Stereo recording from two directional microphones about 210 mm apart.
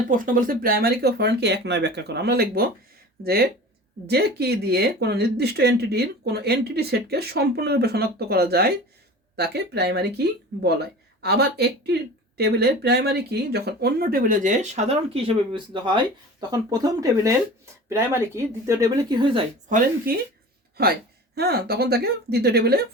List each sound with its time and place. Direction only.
0.1 s speech: 40° right (ahead or behind); by 19.4 s 20° right (ahead or behind)
19.6 s speech: 40° right (ahead or behind)